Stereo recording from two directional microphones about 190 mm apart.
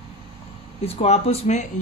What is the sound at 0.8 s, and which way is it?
Speech, 35° left (ahead or behind).